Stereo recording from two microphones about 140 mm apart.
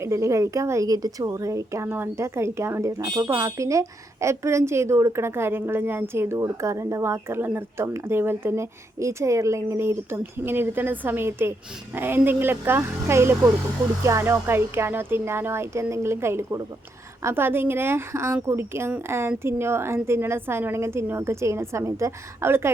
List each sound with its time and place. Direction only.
0.0 s a woman's voice: 20° right (ahead or behind)